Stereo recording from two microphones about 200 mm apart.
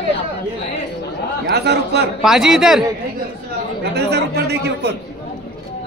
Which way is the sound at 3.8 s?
55° right (ahead or behind).